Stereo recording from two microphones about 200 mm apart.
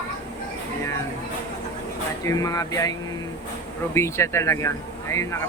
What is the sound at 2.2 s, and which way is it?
Speech, 15° left (ahead or behind).